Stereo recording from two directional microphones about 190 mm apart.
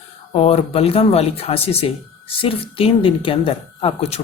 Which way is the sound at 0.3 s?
30° left (ahead or behind).